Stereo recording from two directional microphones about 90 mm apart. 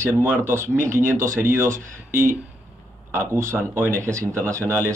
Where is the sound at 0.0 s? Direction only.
25° right (ahead or behind).